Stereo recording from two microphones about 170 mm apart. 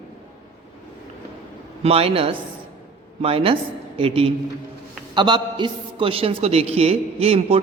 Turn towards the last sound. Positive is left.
turn(degrees=-35)  # may be behind; listen again after turning